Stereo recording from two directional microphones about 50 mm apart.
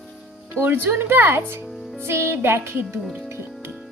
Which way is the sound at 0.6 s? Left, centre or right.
Right.